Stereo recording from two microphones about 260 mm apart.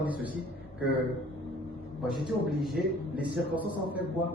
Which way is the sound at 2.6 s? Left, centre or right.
Centre.